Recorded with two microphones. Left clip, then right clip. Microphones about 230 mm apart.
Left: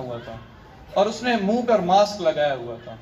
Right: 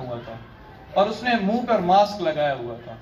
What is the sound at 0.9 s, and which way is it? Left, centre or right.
A man's voice, left.